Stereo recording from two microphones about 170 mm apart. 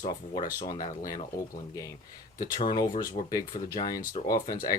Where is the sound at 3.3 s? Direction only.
25° left (ahead or behind).